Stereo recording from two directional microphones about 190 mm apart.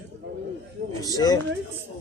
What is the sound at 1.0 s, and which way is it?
Speech, 20° left (ahead or behind).